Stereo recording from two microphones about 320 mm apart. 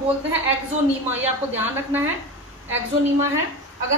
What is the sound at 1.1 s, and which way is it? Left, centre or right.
Speech, centre.